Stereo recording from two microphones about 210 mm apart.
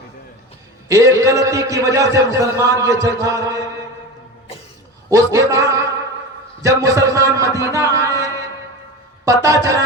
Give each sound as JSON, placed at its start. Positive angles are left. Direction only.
{"t": 0.9, "sound": "a man's voice", "side_deg": -15}
{"t": 5.0, "sound": "a man's voice", "side_deg": -15}